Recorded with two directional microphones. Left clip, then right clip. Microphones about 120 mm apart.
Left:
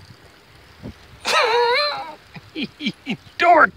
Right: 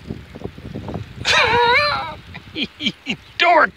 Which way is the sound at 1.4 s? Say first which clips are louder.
Right 3 dB; 45° left (ahead or behind).